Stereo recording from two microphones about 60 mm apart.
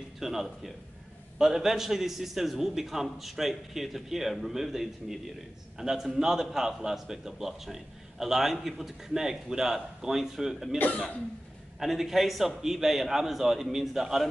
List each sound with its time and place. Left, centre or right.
0.2 s a man's voice: centre
10.8 s cough: left
11.8 s a man's voice: centre